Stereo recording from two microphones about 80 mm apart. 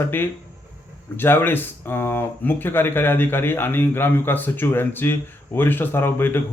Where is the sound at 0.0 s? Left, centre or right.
Left.